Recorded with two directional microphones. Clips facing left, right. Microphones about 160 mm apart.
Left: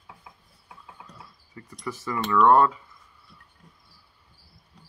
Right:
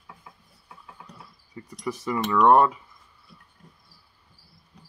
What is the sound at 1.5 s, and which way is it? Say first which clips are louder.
Speech: right 3 dB; 20° right (ahead or behind).